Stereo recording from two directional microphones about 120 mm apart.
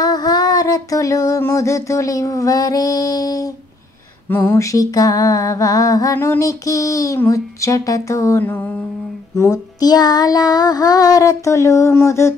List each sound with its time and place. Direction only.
0.0 s child singing: 35° left (ahead or behind)
4.3 s mantra: 25° left (ahead or behind)
9.3 s child singing: 30° left (ahead or behind)